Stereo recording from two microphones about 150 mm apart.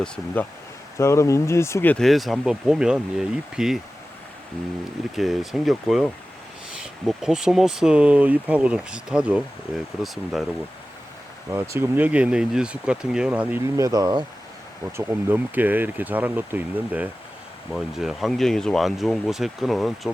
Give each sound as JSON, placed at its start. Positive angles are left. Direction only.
{"t": 0.9, "sound": "speech", "side_deg": 20}
{"t": 2.0, "sound": "speech", "side_deg": 0}
{"t": 5.1, "sound": "speech", "side_deg": 0}
{"t": 11.5, "sound": "speech", "side_deg": -20}
{"t": 14.9, "sound": "speech", "side_deg": -10}